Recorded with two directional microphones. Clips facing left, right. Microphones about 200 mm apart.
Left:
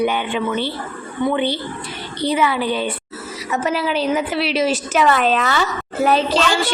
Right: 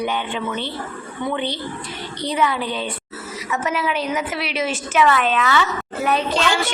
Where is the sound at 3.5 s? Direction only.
35° left (ahead or behind).